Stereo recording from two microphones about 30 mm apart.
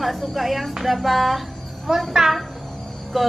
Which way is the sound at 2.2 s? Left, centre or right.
Centre.